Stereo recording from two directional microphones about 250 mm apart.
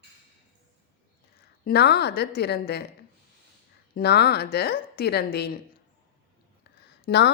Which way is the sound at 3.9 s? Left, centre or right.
Left.